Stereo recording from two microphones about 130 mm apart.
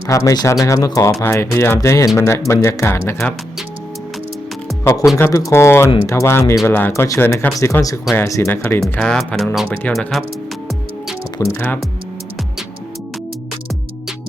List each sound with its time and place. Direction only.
0.1 s speech: 25° left (ahead or behind)
4.8 s speech: 20° left (ahead or behind)
8.8 s speech: 5° left (ahead or behind)